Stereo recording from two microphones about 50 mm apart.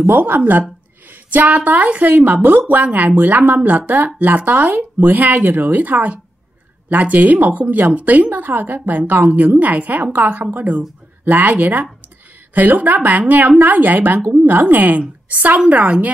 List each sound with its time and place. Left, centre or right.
0.0 s speech: right
1.3 s speech: right